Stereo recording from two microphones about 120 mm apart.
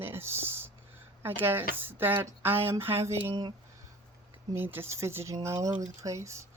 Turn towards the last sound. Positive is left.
turn(degrees=-25)  # may be behind; listen again after turning